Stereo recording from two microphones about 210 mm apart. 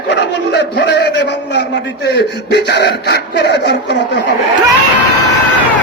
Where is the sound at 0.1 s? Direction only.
55° left (ahead or behind).